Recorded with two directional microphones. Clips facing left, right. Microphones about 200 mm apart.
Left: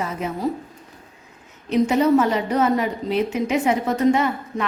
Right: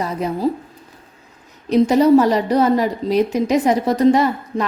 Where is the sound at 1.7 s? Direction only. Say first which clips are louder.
Right 5 dB; 35° right (ahead or behind).